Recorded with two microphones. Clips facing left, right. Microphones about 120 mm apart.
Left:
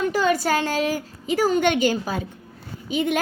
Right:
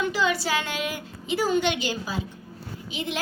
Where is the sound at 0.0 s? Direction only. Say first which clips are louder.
Left 4 dB; 45° left (ahead or behind).